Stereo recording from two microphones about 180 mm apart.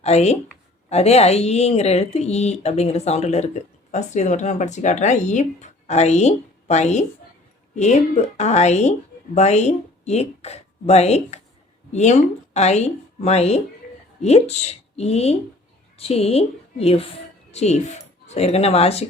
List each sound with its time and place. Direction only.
0.0 s a woman's voice: 35° left (ahead or behind)